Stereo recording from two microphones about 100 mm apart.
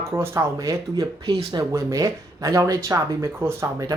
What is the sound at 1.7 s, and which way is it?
Speech, 30° right (ahead or behind).